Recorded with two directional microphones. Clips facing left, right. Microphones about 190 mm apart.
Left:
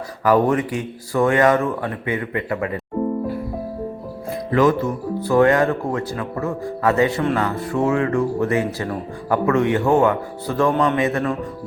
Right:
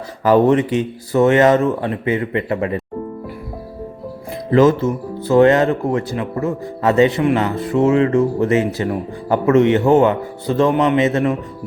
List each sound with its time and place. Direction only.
0.3 s speech: 25° right (ahead or behind)
4.5 s speech: 25° right (ahead or behind)